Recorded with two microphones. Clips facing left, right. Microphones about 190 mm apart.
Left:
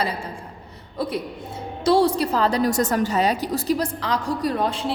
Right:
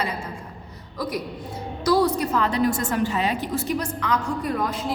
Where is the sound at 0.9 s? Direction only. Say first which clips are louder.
Left 2 dB; 30° left (ahead or behind).